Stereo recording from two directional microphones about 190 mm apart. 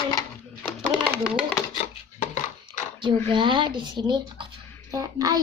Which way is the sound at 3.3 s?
25° right (ahead or behind).